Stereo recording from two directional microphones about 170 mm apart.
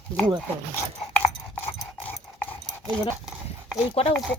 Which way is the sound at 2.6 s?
Centre (ahead or behind).